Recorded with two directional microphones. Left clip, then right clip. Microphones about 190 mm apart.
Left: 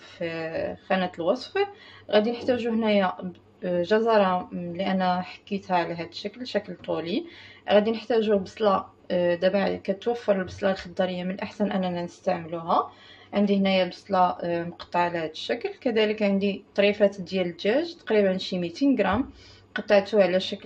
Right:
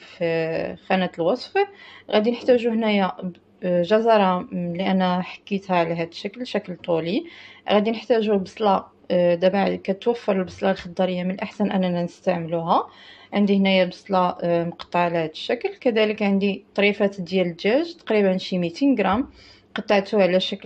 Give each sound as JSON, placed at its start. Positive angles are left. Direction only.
{"t": 0.2, "sound": "speech", "side_deg": -30}